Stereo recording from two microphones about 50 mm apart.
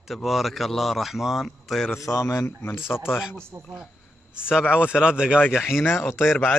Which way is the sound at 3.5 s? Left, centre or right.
Right.